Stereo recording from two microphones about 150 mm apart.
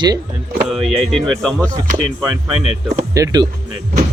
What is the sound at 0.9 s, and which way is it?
Speech, centre (ahead or behind).